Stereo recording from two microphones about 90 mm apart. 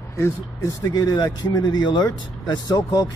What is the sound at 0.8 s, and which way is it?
Speech, 45° left (ahead or behind).